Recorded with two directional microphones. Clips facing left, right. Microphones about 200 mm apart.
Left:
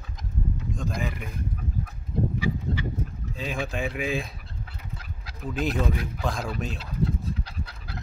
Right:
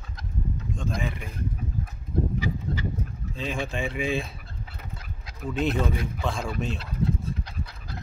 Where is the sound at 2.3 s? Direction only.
45° right (ahead or behind).